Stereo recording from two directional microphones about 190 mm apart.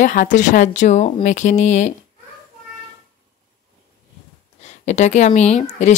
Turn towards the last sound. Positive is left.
turn(degrees=35)  # may be behind; listen again after turning